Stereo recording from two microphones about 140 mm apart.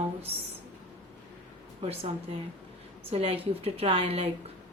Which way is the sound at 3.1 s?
45° right (ahead or behind).